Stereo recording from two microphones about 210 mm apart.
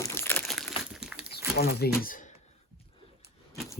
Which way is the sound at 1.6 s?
50° left (ahead or behind).